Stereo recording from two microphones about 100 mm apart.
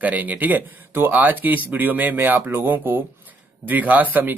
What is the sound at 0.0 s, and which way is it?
Speech, 15° right (ahead or behind).